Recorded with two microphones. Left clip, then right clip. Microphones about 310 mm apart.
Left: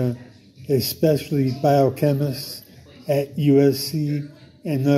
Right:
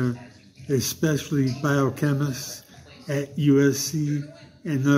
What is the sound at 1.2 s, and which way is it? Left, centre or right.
A man's voice, centre.